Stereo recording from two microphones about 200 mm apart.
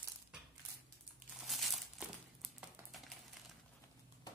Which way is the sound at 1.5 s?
Centre (ahead or behind).